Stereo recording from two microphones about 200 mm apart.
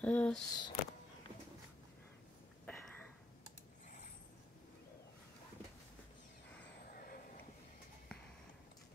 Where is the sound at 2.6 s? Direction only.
10° left (ahead or behind).